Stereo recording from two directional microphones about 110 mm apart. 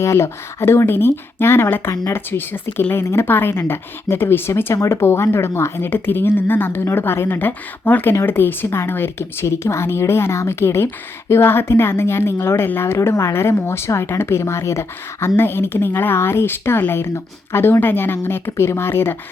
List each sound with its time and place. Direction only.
0.0 s speech: 25° left (ahead or behind)